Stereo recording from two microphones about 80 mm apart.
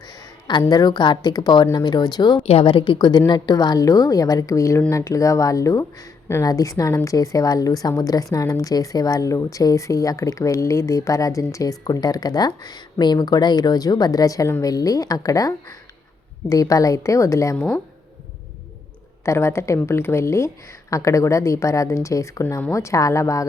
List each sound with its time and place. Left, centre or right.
0.7 s a woman's voice: left
19.2 s speech: left